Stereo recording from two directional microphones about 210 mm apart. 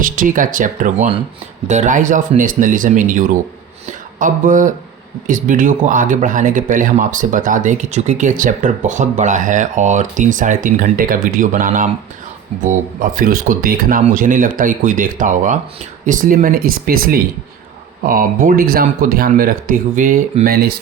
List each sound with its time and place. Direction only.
0.0 s speech: 40° right (ahead or behind)